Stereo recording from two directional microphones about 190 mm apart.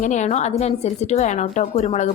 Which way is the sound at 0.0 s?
40° left (ahead or behind).